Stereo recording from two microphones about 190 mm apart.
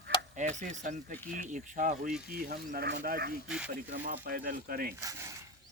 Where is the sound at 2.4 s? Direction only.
55° right (ahead or behind).